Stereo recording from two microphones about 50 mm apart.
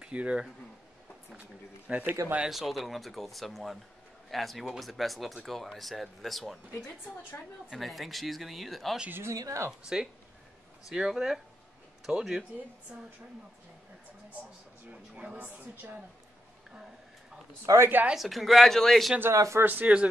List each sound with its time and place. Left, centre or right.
0.0 s speech: right
2.4 s speech: centre
7.7 s speech: centre
9.2 s a woman's voice: right
9.9 s speech: centre
12.9 s speech: right
14.9 s a woman's voice: right
17.7 s speech: right
18.1 s speech: centre
19.3 s speech: right
19.6 s a woman's voice: right